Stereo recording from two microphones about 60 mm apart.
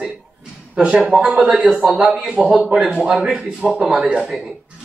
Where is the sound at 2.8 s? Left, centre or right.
Centre.